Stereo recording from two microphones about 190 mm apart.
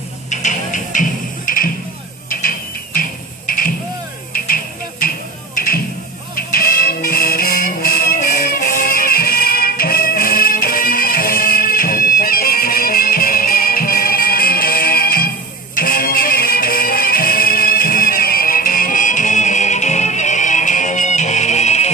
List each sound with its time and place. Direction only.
0.3 s music: 40° left (ahead or behind)
5.0 s music: 50° left (ahead or behind)